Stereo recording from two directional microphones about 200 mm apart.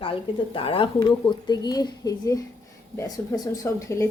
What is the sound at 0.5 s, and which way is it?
Speech, 25° left (ahead or behind).